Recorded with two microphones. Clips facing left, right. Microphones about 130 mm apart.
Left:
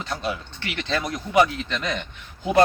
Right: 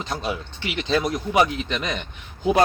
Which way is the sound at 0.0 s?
15° right (ahead or behind).